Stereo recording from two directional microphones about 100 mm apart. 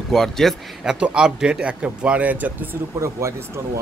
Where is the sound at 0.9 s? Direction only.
10° right (ahead or behind).